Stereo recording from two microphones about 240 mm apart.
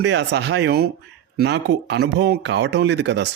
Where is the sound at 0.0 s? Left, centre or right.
Right.